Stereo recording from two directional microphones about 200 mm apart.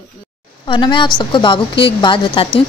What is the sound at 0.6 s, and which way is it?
A woman's voice, 25° left (ahead or behind).